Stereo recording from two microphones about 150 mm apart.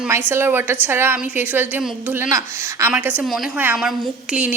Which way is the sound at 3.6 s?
10° right (ahead or behind).